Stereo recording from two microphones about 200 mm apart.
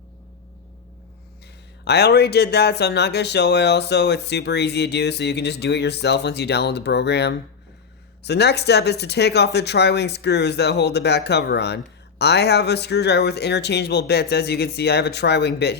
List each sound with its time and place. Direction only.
1.8 s speech: 55° left (ahead or behind)